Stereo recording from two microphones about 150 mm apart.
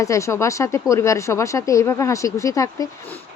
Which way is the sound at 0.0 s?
20° left (ahead or behind).